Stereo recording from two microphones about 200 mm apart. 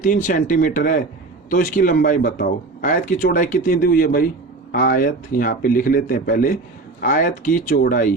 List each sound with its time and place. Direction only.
0.0 s speech: 40° left (ahead or behind)